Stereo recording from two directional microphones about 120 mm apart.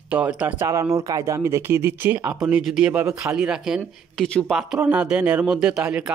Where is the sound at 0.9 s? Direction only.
25° right (ahead or behind); by 3.8 s 5° right (ahead or behind).